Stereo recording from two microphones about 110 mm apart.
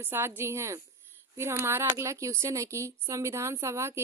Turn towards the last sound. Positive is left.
turn(degrees=-25)  # may be behind; listen again after turning